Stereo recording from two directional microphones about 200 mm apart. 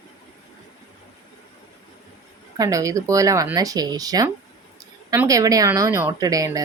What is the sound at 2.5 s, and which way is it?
Speech, 15° right (ahead or behind).